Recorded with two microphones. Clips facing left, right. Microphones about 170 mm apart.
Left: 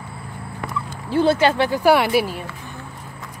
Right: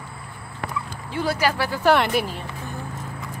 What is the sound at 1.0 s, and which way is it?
Speech, 30° left (ahead or behind).